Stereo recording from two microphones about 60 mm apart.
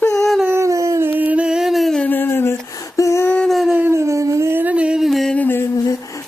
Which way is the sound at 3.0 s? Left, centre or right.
Left.